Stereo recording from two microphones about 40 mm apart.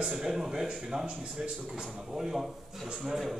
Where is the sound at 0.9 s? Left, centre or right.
Right.